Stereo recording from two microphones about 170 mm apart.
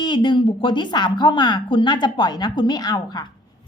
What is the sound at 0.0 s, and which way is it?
A woman's voice, 25° left (ahead or behind).